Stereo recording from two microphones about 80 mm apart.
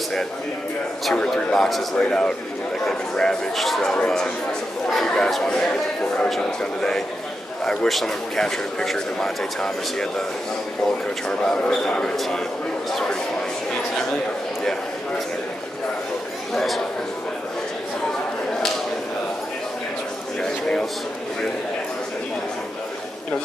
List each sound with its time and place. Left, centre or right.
1.1 s a man's voice: centre
11.2 s speech: centre
14.6 s a man's voice: centre
16.5 s a man's voice: centre
20.3 s a sound: centre